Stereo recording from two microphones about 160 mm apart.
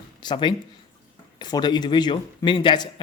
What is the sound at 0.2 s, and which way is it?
A man's voice, 30° left (ahead or behind).